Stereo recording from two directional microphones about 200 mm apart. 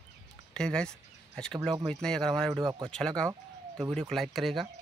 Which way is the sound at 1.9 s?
5° left (ahead or behind).